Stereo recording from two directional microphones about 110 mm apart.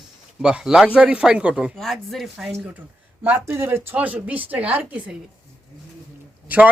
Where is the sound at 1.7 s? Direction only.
Centre (ahead or behind).